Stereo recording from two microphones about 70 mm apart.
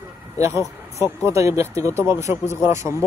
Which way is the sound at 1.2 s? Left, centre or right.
Right.